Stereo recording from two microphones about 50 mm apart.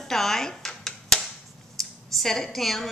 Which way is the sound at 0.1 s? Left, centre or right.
Centre.